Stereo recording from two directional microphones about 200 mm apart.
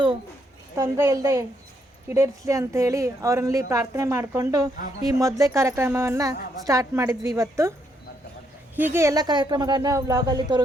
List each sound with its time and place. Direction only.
0.8 s a woman's voice: 15° right (ahead or behind)
8.7 s a woman's voice: 10° right (ahead or behind)